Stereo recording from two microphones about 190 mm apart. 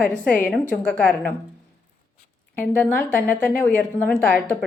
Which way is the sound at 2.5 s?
10° left (ahead or behind).